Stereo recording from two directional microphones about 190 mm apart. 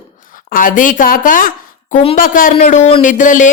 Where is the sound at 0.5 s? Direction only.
45° left (ahead or behind).